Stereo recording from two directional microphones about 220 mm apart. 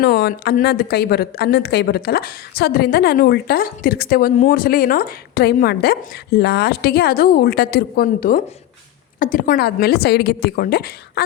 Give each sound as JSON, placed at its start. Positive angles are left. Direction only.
{"t": 0.0, "sound": "a woman's voice", "side_deg": 45}